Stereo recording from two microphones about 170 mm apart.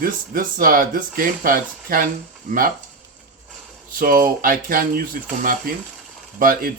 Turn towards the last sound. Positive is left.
turn(degrees=-60)  # may be behind; listen again after turning